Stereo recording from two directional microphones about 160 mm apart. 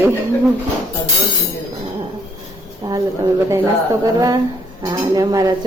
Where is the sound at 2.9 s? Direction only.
20° right (ahead or behind).